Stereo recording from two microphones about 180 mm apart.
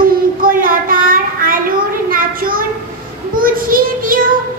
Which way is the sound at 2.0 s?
50° right (ahead or behind).